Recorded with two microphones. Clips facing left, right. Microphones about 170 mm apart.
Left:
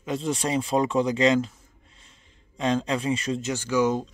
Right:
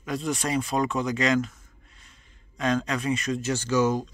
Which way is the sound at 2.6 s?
25° left (ahead or behind).